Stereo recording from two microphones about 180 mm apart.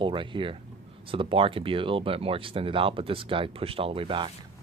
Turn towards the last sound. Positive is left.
turn(degrees=-30)  # may be behind; listen again after turning